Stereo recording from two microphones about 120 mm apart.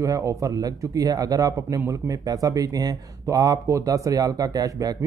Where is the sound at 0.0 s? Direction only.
25° right (ahead or behind).